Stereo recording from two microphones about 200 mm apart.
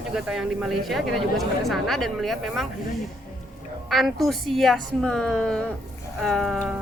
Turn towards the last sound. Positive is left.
turn(degrees=0)  # may be behind; listen again after turning